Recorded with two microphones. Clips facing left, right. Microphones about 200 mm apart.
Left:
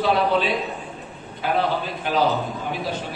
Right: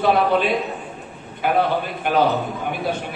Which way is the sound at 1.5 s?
55° right (ahead or behind).